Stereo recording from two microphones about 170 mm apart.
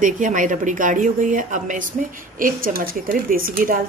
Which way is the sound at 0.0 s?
50° right (ahead or behind).